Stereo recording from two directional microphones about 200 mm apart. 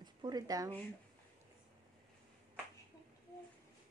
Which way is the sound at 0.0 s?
20° right (ahead or behind).